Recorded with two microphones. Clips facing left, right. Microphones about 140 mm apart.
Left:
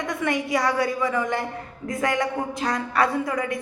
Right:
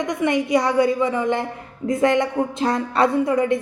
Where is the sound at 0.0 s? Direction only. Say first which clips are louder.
Right 5 dB; 20° right (ahead or behind).